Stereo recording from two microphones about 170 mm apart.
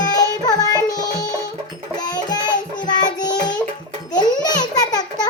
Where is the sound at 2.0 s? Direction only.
25° left (ahead or behind).